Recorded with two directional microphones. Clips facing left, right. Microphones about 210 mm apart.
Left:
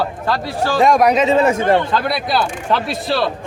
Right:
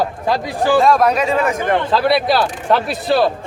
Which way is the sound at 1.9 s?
Centre (ahead or behind).